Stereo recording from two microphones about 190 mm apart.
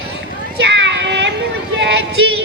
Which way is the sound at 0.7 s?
70° right (ahead or behind).